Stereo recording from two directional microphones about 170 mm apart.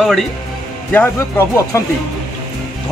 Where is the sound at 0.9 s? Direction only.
15° left (ahead or behind).